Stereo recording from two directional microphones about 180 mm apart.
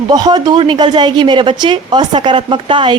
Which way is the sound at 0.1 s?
20° right (ahead or behind).